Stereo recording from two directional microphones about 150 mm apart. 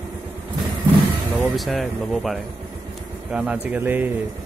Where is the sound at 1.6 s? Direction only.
Centre (ahead or behind).